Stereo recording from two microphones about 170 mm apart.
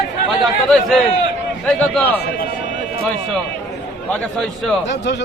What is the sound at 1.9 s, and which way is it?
Speech, 10° left (ahead or behind).